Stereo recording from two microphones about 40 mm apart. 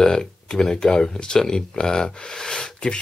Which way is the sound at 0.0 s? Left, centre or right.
Centre.